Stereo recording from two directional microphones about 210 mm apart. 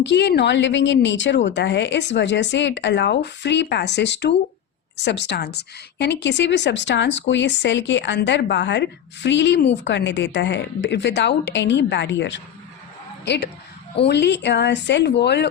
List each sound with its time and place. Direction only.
0.0 s a woman's voice: 55° left (ahead or behind)